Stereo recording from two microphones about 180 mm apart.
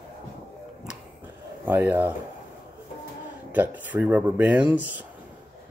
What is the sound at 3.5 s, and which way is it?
Speech, 10° right (ahead or behind).